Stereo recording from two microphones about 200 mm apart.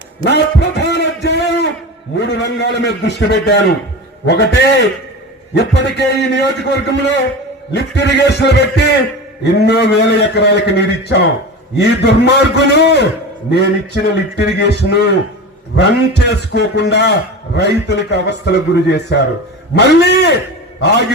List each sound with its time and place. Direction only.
0.3 s a man's voice: 55° left (ahead or behind)